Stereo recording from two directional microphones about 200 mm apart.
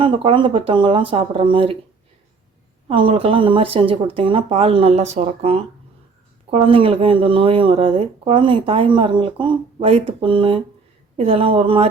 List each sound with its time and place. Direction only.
0.0 s speech: 25° right (ahead or behind)
2.9 s speech: 25° right (ahead or behind)